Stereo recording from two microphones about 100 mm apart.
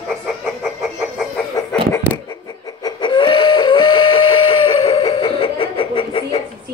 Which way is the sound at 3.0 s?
55° left (ahead or behind).